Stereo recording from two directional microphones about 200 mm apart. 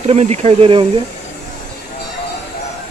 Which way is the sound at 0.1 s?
35° right (ahead or behind).